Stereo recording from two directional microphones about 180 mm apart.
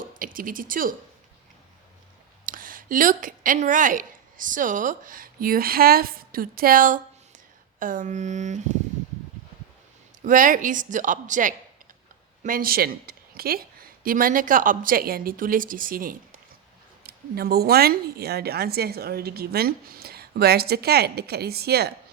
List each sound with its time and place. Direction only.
0.2 s a woman's voice: 50° right (ahead or behind)
2.5 s a woman's voice: 50° right (ahead or behind)
10.2 s a woman's voice: 45° right (ahead or behind)